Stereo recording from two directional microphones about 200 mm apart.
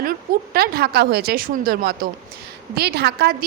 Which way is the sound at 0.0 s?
50° right (ahead or behind).